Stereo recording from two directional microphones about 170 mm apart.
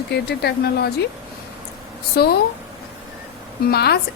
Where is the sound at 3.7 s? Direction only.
70° left (ahead or behind).